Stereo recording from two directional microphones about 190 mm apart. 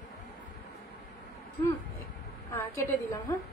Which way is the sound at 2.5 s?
15° left (ahead or behind).